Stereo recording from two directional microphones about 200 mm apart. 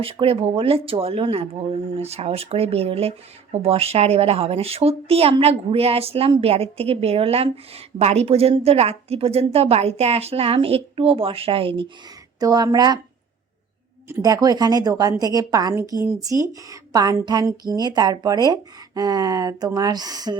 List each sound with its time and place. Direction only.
0.0 s speech: 30° right (ahead or behind)
14.1 s speech: 20° right (ahead or behind)